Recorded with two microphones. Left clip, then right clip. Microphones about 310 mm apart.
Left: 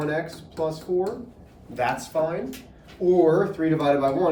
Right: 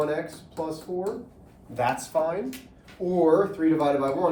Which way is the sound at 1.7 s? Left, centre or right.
Centre.